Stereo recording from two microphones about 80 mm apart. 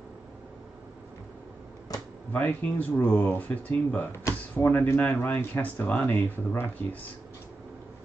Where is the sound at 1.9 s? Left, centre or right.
Left.